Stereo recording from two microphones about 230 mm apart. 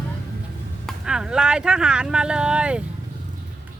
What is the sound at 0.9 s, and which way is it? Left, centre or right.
Speech, centre.